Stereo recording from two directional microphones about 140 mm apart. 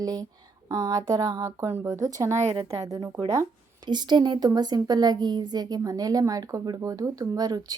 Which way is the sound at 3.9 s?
30° right (ahead or behind).